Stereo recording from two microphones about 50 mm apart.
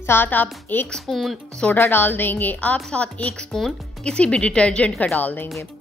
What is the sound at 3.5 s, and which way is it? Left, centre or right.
Speech, centre.